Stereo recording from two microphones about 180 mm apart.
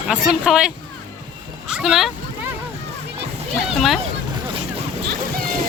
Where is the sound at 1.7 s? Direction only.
Centre (ahead or behind).